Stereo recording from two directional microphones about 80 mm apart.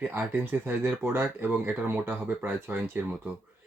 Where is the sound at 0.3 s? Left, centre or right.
Right.